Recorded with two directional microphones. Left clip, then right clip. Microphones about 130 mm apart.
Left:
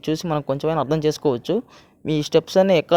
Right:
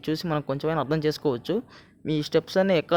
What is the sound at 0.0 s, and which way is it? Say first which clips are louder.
Speech: left 4 dB; 30° left (ahead or behind).